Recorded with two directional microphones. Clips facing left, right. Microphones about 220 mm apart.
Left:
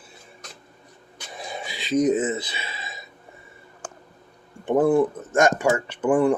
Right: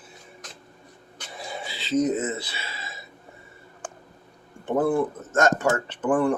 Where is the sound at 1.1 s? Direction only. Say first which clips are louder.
Left 1 dB; 20° left (ahead or behind).